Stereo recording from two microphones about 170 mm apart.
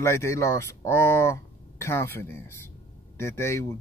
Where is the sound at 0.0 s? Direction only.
15° left (ahead or behind).